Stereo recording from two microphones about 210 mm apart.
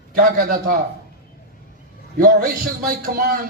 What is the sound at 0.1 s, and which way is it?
Speech, 40° right (ahead or behind).